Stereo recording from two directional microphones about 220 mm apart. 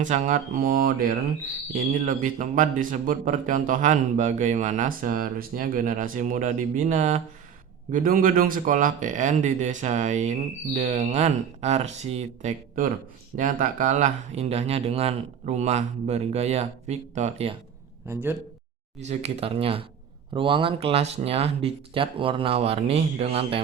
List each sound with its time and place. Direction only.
0.0 s speech: 35° right (ahead or behind)
18.1 s speech: 10° right (ahead or behind)
18.9 s speech: 30° right (ahead or behind)